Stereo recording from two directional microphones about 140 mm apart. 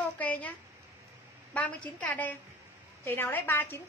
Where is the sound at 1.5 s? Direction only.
10° left (ahead or behind).